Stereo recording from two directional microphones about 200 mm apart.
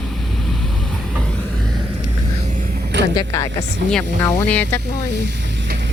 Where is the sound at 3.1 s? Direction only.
15° left (ahead or behind).